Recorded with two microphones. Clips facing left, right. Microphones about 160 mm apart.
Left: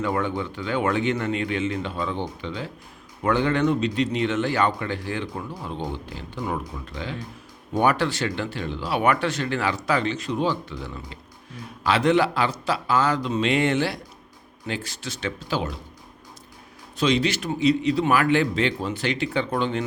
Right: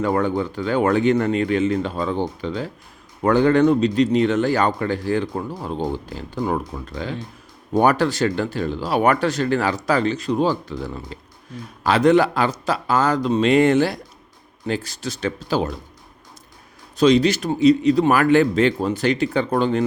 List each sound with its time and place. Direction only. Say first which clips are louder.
0.0 s a man's voice: right 5 dB; 40° right (ahead or behind)
17.0 s a man's voice: right 7 dB; 40° right (ahead or behind)